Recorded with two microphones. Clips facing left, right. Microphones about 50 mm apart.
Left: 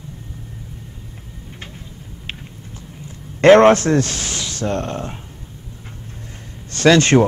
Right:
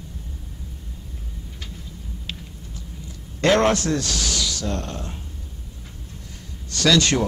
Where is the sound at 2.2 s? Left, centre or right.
Left.